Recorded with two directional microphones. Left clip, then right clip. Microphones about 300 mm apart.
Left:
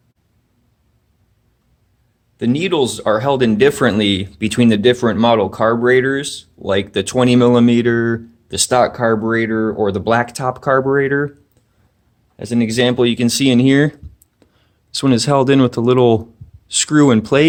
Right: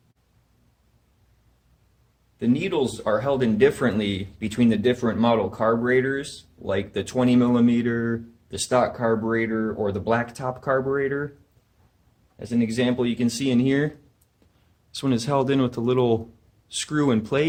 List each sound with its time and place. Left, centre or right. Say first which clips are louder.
2.4 s speech: left 7 dB; left
12.4 s speech: left 8 dB; left